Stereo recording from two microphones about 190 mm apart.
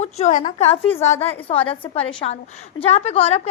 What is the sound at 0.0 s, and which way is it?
A woman's voice, 40° left (ahead or behind).